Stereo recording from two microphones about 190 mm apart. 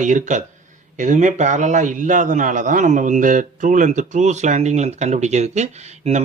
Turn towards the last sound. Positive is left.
turn(degrees=-35)  # may be behind; listen again after turning